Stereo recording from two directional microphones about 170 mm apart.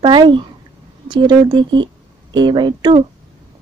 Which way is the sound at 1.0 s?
25° right (ahead or behind).